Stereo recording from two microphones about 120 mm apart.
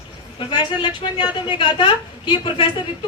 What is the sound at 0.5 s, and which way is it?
A woman's voice, 40° left (ahead or behind).